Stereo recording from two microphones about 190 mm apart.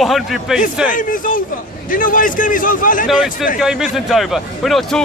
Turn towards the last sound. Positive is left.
turn(degrees=0)  # may be behind; listen again after turning